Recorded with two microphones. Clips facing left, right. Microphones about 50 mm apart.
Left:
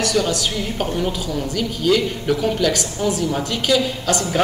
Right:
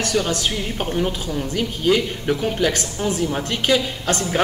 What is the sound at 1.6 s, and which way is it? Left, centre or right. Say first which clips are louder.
A woman's voice: left 1 dB; right.